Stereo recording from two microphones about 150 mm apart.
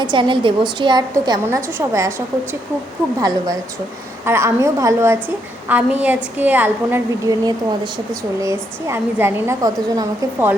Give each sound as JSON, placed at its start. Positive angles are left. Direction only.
{"t": 0.0, "sound": "a woman's voice", "side_deg": -30}
{"t": 5.6, "sound": "a woman's voice", "side_deg": -10}
{"t": 7.3, "sound": "a woman's voice", "side_deg": -25}